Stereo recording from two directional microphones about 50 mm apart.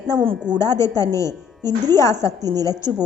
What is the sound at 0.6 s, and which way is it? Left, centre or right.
A woman's voice, left.